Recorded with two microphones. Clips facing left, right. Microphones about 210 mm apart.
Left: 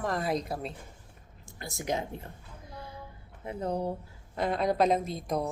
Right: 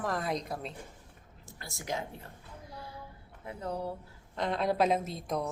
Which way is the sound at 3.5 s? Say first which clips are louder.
Left 5 dB; 20° left (ahead or behind).